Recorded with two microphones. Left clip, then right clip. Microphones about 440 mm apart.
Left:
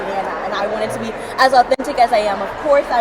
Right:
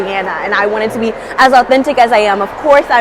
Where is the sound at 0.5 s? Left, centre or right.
Right.